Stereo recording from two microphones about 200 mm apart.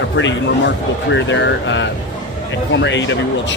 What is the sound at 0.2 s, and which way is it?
Speech, 65° left (ahead or behind).